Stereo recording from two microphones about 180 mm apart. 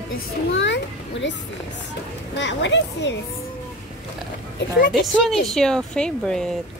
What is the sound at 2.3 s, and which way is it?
Speech, 90° left.